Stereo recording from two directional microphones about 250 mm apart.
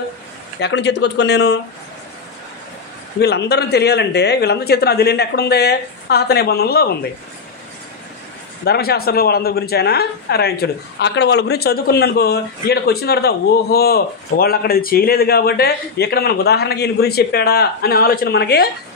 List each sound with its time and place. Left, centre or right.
0.6 s speech: left
3.2 s a woman's voice: left
8.6 s a woman's voice: left